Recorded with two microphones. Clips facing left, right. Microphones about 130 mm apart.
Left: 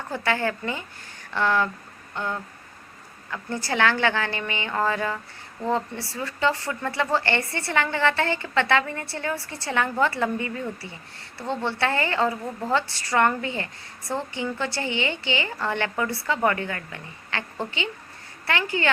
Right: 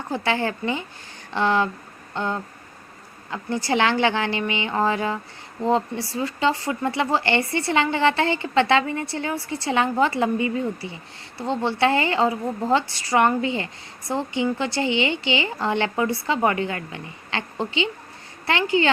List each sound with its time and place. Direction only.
0.1 s speech: 20° right (ahead or behind)